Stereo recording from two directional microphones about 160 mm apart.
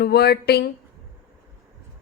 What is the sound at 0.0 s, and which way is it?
Speech, 80° left.